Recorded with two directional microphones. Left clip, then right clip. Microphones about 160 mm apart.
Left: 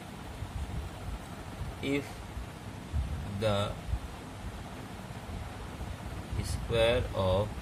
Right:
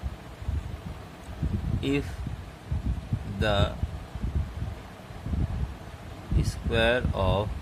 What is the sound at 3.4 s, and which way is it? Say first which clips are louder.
Speech: right 4 dB; 55° right (ahead or behind).